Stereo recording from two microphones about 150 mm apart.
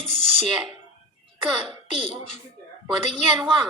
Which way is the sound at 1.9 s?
50° left (ahead or behind).